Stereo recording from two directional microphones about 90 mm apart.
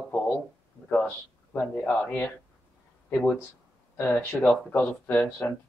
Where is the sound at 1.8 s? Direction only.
20° left (ahead or behind).